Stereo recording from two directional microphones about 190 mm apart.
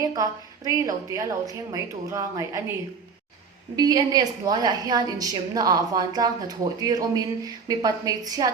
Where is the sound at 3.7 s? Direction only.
20° right (ahead or behind).